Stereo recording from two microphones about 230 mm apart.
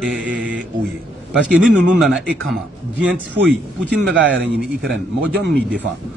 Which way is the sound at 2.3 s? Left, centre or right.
Centre.